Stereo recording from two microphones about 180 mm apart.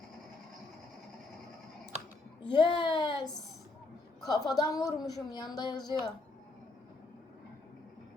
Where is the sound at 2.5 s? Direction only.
25° left (ahead or behind).